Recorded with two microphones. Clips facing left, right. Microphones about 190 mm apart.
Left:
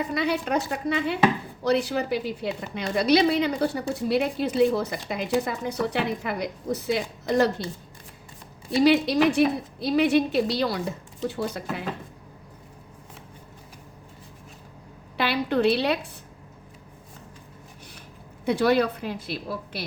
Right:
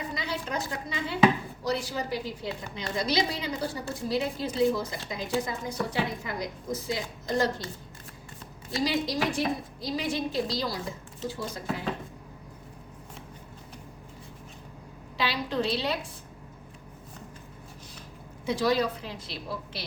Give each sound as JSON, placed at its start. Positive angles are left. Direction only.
{"t": 0.1, "sound": "a woman's voice", "side_deg": 65}
{"t": 8.8, "sound": "a woman's voice", "side_deg": 65}
{"t": 15.2, "sound": "a woman's voice", "side_deg": 60}
{"t": 18.4, "sound": "a woman's voice", "side_deg": 60}